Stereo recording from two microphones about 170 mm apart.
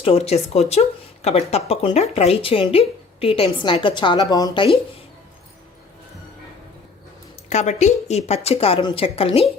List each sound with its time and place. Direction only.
0.0 s speech: 35° left (ahead or behind)
7.5 s a woman's voice: 40° left (ahead or behind)